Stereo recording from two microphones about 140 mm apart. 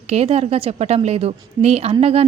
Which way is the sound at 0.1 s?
50° right (ahead or behind).